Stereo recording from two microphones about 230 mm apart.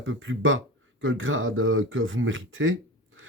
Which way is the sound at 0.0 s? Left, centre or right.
Right.